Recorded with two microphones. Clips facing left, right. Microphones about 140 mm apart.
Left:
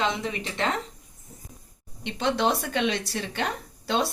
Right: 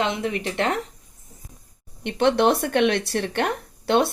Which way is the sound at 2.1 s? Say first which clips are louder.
Right 6 dB; 60° right (ahead or behind).